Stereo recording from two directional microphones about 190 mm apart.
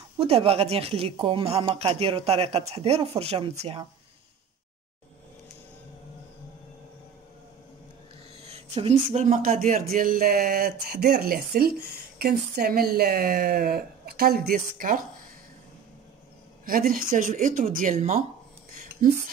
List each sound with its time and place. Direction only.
0.2 s a woman's voice: 30° right (ahead or behind)
8.4 s speech: 35° right (ahead or behind)
16.6 s speech: 50° right (ahead or behind)
18.8 s a sound: 45° right (ahead or behind)